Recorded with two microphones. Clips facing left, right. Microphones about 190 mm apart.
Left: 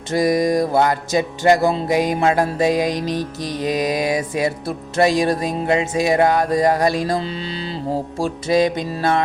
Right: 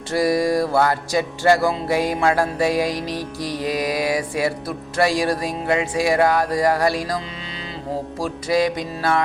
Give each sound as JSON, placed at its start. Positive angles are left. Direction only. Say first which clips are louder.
{"t": 0.1, "sound": "music", "louder": "left 2 dB", "side_deg": 20}
{"t": 8.2, "sound": "music", "louder": "left 3 dB", "side_deg": 25}